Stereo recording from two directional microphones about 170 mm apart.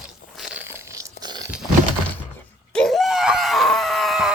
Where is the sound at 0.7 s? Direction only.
15° right (ahead or behind).